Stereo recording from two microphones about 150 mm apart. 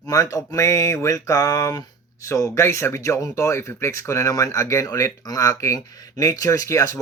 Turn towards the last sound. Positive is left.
turn(degrees=20)  # may be behind; listen again after turning